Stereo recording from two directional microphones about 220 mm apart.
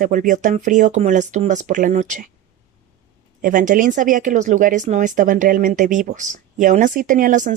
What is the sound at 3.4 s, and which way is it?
Speech, 40° right (ahead or behind).